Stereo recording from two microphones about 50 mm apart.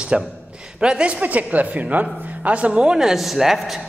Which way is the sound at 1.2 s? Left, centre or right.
Right.